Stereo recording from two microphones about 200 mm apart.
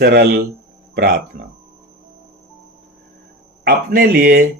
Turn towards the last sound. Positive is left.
turn(degrees=-50)  # may be behind; listen again after turning